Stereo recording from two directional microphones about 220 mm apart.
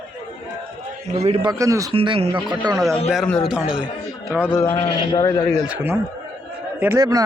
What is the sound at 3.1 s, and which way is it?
A man's voice, centre (ahead or behind).